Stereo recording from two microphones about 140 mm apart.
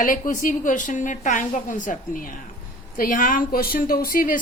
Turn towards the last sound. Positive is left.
turn(degrees=80)